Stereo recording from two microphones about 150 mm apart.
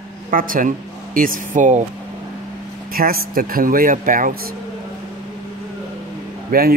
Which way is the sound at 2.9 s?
75° right (ahead or behind).